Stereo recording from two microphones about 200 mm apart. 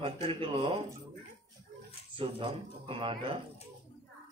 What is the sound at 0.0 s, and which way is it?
Speech, 25° right (ahead or behind).